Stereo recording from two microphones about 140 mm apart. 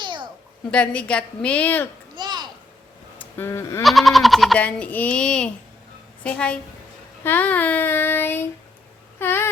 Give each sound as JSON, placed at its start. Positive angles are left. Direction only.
{"t": 0.0, "sound": "babbling", "side_deg": -35}
{"t": 0.7, "sound": "child singing", "side_deg": 10}
{"t": 2.1, "sound": "a sound", "side_deg": -30}
{"t": 3.2, "sound": "speech", "side_deg": 15}
{"t": 3.8, "sound": "speech", "side_deg": 0}
{"t": 4.6, "sound": "child singing", "side_deg": 10}
{"t": 9.1, "sound": "a sound", "side_deg": 15}